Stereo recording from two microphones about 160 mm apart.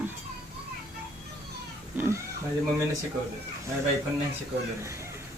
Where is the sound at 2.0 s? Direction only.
15° right (ahead or behind).